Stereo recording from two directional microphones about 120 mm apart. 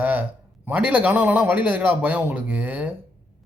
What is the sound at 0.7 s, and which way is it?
A woman's voice, 15° right (ahead or behind).